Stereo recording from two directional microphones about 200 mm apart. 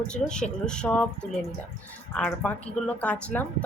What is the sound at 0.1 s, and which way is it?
Speech, 5° left (ahead or behind).